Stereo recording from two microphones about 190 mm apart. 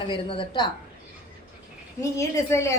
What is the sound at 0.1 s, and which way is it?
Speech, 25° left (ahead or behind).